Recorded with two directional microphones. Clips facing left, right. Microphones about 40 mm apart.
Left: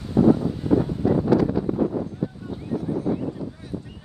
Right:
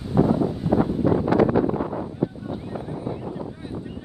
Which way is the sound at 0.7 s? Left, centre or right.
Right.